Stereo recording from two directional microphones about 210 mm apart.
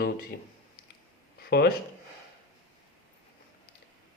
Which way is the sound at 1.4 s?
50° left (ahead or behind).